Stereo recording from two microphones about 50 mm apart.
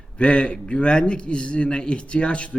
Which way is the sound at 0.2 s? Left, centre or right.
Left.